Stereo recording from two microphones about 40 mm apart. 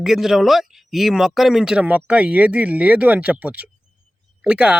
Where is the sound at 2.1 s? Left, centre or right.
Right.